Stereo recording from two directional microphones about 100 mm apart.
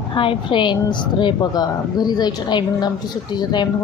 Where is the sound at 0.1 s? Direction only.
55° left (ahead or behind).